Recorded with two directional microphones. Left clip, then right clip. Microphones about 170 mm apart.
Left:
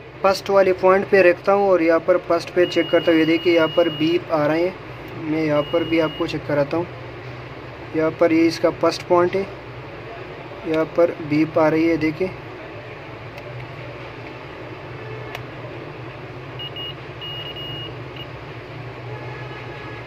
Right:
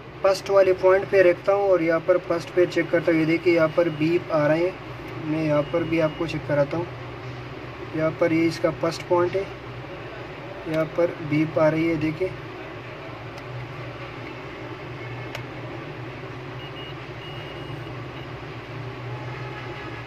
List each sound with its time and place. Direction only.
0.2 s speech: 20° left (ahead or behind)
8.0 s speech: 25° left (ahead or behind)
10.7 s speech: 30° left (ahead or behind)